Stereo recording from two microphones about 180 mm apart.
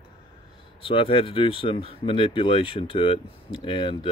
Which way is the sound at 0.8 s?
30° left (ahead or behind).